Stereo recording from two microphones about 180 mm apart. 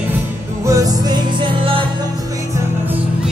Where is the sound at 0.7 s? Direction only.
20° right (ahead or behind).